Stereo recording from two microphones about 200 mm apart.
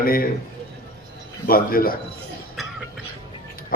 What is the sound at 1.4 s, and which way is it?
Speech, 45° left (ahead or behind).